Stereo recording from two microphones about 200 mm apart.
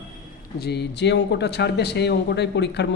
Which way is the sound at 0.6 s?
55° left (ahead or behind).